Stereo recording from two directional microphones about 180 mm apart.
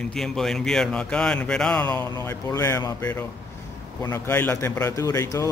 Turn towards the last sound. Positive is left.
turn(degrees=15)  # may be behind; listen again after turning